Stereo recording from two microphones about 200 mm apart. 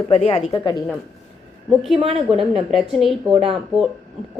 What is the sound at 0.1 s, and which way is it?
Speech, 30° left (ahead or behind).